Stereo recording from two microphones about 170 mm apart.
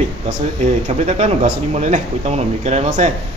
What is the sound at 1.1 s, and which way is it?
A man's voice, 45° right (ahead or behind).